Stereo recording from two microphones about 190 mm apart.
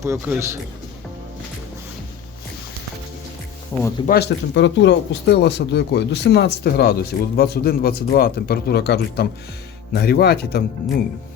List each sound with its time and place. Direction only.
0.0 s a man's voice: 15° right (ahead or behind)
4.0 s speech: 55° left (ahead or behind)